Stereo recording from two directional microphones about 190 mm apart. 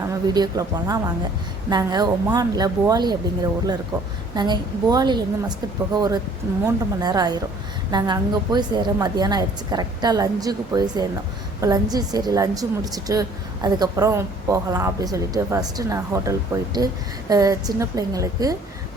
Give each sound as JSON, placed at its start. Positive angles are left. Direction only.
{"t": 0.3, "sound": "a woman's voice", "side_deg": -20}
{"t": 4.4, "sound": "a woman's voice", "side_deg": -20}